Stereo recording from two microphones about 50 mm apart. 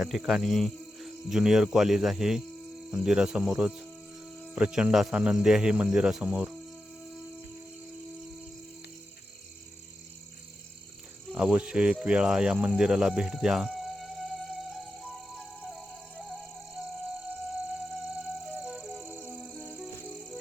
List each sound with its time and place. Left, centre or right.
0.0 s speech: centre
6.2 s cricket: right
7.0 s music: centre
11.3 s cricket: right
12.0 s insect: centre
18.1 s music: centre